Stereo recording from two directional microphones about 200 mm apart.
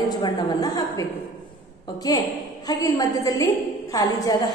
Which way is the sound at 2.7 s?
20° left (ahead or behind).